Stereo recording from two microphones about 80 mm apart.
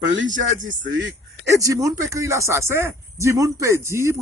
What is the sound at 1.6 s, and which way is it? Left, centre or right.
Speech, right.